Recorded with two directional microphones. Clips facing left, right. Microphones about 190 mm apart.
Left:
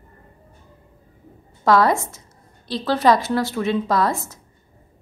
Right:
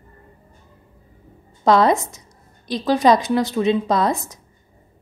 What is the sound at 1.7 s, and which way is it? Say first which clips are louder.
A woman's voice: right 2 dB; 20° right (ahead or behind).